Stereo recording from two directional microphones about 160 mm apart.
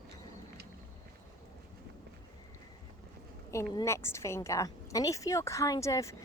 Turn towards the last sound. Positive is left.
turn(degrees=20)  # may be behind; listen again after turning